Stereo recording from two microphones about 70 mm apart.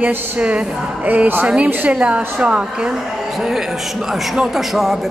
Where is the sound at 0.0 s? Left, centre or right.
Centre.